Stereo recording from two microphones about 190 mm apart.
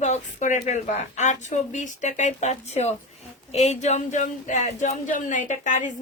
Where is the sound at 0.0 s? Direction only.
40° left (ahead or behind).